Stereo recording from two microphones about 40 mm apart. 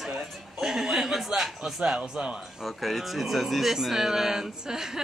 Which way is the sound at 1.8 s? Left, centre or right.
Centre.